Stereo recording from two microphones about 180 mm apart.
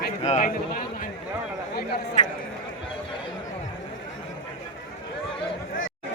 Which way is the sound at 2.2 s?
40° left (ahead or behind).